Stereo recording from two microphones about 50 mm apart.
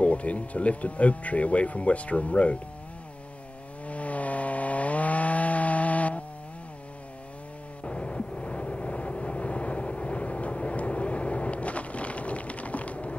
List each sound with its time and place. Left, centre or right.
0.0 s speech: left
3.8 s wood: left
7.8 s vehicle: left